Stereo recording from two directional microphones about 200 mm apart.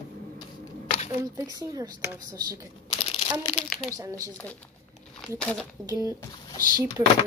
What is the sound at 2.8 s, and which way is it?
Crumpling, 30° left (ahead or behind).